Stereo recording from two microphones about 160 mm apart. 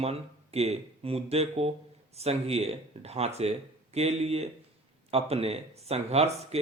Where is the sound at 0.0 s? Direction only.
40° right (ahead or behind).